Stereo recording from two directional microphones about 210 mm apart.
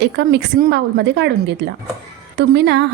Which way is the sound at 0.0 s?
50° right (ahead or behind).